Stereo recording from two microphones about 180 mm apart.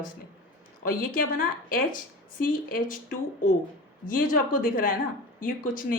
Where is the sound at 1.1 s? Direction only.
50° left (ahead or behind).